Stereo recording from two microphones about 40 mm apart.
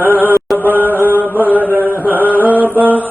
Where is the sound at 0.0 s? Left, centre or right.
Right.